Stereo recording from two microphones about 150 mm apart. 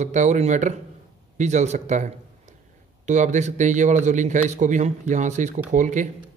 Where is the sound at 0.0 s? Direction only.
50° right (ahead or behind).